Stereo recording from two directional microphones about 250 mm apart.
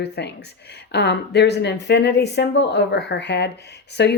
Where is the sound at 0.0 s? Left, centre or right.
Left.